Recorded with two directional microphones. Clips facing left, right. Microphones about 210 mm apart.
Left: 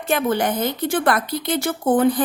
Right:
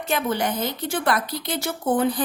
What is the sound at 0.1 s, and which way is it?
Speech, 50° left (ahead or behind).